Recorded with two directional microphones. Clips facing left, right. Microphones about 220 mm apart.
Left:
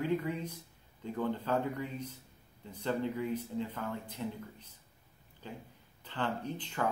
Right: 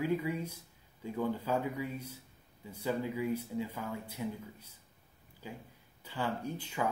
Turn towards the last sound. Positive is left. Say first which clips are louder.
# even
turn(degrees=-10)  # may be behind; listen again after turning